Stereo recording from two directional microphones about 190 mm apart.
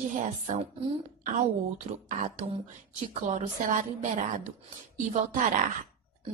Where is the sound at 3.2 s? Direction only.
40° right (ahead or behind).